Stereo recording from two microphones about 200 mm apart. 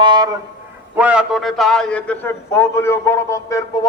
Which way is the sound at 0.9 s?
5° right (ahead or behind).